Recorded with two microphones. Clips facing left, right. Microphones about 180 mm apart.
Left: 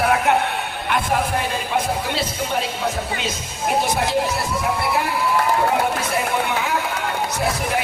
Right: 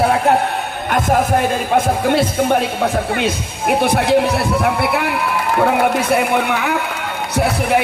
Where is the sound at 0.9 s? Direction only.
45° right (ahead or behind).